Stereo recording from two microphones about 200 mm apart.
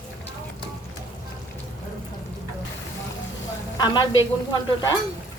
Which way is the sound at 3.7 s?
20° left (ahead or behind).